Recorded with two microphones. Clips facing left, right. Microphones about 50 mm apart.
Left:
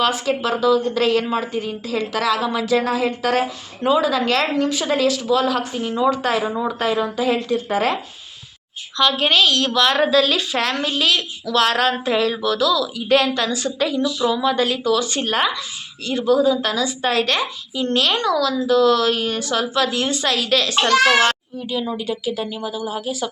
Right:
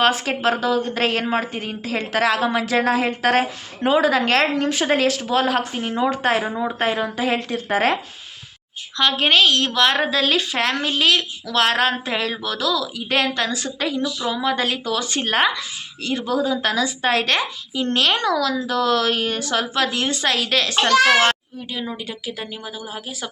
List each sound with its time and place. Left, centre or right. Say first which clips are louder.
0.0 s a woman's voice: right 1 dB; right
9.0 s a woman's voice: even; right
14.2 s a woman's voice: left 5 dB; right
14.9 s a woman's voice: left 1 dB; right
21.7 s speech: left 5 dB; centre